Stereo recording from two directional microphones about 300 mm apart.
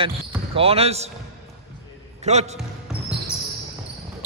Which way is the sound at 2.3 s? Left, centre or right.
Right.